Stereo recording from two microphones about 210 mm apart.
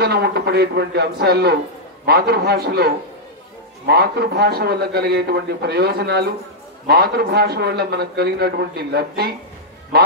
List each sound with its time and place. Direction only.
0.0 s a man's voice: 50° right (ahead or behind)